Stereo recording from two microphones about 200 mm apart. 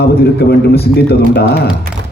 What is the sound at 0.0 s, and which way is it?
Speech, 50° left (ahead or behind).